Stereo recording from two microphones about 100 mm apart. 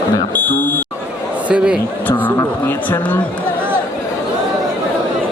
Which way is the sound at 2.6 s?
20° left (ahead or behind).